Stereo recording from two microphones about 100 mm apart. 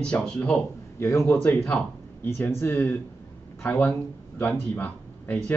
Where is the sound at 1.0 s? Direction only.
30° left (ahead or behind).